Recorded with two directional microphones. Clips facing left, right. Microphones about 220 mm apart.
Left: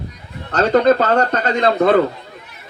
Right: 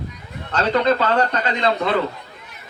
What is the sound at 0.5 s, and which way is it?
Speech, 45° left (ahead or behind).